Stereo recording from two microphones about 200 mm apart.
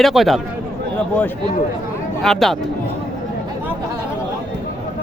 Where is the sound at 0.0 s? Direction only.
Centre (ahead or behind).